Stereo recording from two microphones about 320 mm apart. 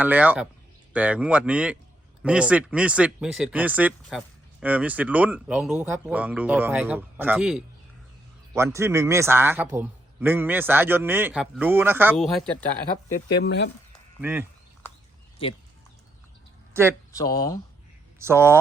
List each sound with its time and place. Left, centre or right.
0.0 s a man's voice: centre
13.1 s speech: left
14.2 s speech: centre
17.1 s speech: centre
18.2 s a man's voice: centre